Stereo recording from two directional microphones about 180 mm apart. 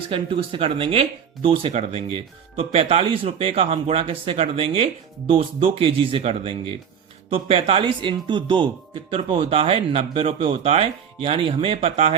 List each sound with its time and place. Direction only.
0.1 s speech: 30° right (ahead or behind)